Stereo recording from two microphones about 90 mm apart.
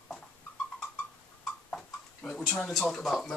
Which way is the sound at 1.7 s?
5° left (ahead or behind).